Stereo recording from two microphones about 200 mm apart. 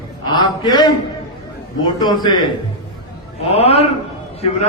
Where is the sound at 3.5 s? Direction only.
30° left (ahead or behind).